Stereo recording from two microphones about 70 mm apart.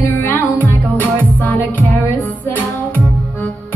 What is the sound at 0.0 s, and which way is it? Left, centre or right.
Music, left.